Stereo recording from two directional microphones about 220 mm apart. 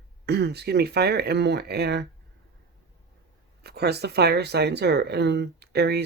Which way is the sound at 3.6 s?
45° right (ahead or behind).